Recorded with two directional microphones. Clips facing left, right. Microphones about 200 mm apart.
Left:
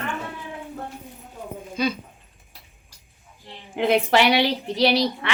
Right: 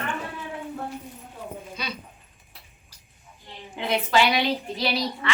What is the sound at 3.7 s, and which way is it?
A woman's voice, 55° left (ahead or behind).